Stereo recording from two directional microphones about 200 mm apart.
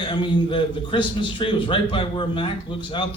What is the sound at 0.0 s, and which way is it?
A man's voice, 25° left (ahead or behind).